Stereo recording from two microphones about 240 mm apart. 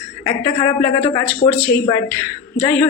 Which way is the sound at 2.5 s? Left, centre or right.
Centre.